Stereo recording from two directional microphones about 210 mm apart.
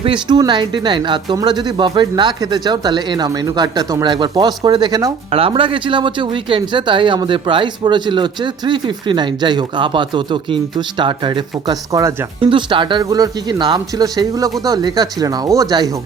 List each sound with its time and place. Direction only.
0.0 s speech: 20° right (ahead or behind)